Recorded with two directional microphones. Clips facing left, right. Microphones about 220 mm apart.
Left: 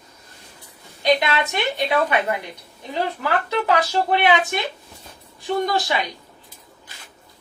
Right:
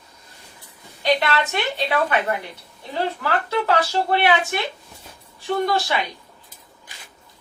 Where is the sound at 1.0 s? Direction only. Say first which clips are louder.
Left 1 dB; 15° left (ahead or behind).